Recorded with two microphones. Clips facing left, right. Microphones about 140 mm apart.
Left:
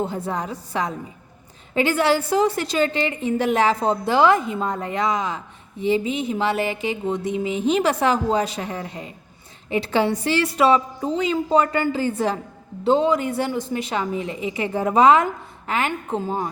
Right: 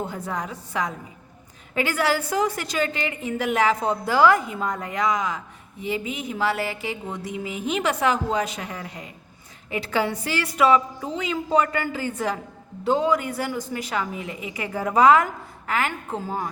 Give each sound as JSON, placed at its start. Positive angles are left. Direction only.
{"t": 0.0, "sound": "a woman's voice", "side_deg": 30}